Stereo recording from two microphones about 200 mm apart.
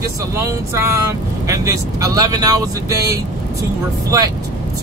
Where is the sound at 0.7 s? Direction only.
15° right (ahead or behind).